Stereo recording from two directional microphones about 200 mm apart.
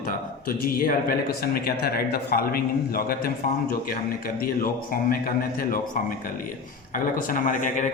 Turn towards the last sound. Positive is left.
turn(degrees=40)  # may be behind; listen again after turning